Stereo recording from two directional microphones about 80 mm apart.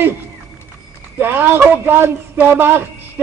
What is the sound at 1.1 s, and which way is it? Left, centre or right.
A man's voice, right.